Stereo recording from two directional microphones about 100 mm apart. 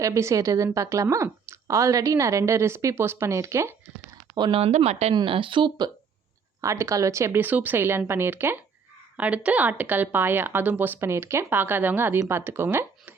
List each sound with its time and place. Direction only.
0.0 s speech: 30° right (ahead or behind)
4.5 s speech: 90° right
5.1 s speech: 60° right (ahead or behind)
6.6 s speech: 30° right (ahead or behind)